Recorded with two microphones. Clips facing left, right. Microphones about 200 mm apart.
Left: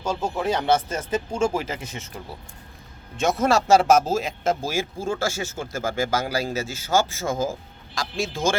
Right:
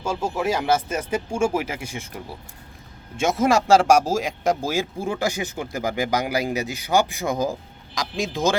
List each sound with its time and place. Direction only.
0.0 s speech: 10° right (ahead or behind)
3.2 s speech: 10° right (ahead or behind)